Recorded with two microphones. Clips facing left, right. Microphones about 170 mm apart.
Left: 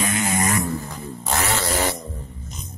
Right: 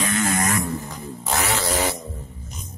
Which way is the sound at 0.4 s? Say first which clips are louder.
Left 1 dB; centre (ahead or behind).